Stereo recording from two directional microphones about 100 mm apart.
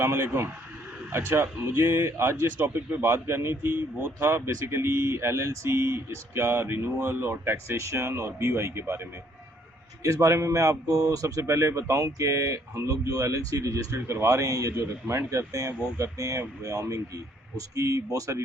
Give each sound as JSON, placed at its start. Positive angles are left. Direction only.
{"t": 0.0, "sound": "speech", "side_deg": -25}
{"t": 10.0, "sound": "speech", "side_deg": -35}